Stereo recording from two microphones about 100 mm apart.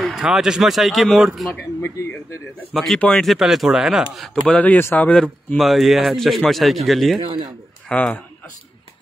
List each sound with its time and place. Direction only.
0.0 s speech: 5° right (ahead or behind)
1.5 s speech: 25° left (ahead or behind)
2.7 s speech: centre (ahead or behind)
4.5 s speech: 15° left (ahead or behind)
7.9 s a man's voice: 10° left (ahead or behind)